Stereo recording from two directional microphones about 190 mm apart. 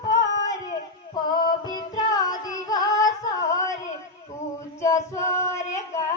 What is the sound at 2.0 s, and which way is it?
Singing, 20° left (ahead or behind).